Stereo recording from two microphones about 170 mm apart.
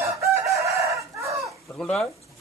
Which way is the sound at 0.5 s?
15° right (ahead or behind).